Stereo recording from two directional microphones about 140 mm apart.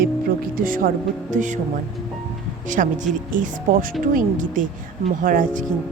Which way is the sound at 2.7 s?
70° right (ahead or behind).